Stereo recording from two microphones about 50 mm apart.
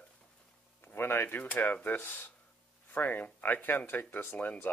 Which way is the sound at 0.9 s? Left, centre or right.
Left.